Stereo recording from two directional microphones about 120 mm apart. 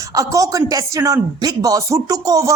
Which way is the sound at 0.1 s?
30° right (ahead or behind).